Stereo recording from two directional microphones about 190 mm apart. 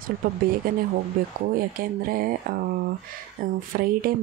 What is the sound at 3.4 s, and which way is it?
Speech, 50° right (ahead or behind).